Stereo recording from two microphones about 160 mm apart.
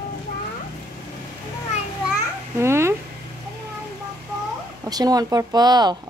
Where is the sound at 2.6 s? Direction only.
15° right (ahead or behind).